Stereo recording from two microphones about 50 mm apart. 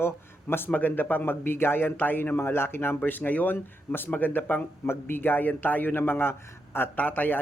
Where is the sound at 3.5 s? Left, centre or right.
Left.